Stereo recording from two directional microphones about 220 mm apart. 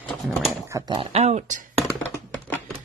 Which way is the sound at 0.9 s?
30° right (ahead or behind).